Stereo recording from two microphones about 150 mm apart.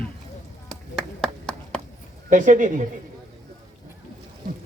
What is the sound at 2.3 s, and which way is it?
Speech, 60° right (ahead or behind).